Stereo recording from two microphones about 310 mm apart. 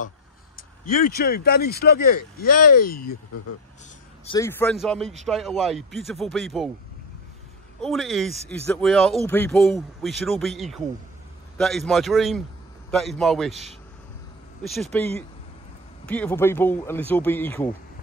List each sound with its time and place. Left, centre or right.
0.6 s speech: left
4.3 s speech: centre
7.8 s speech: centre
14.6 s speech: centre
16.1 s speech: centre